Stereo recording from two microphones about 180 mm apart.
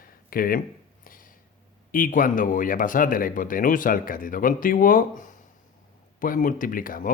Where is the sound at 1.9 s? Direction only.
50° left (ahead or behind).